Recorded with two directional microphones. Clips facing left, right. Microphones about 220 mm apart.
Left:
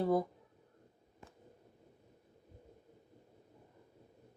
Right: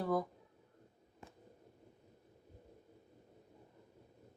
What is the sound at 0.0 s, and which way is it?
Speech, 25° left (ahead or behind).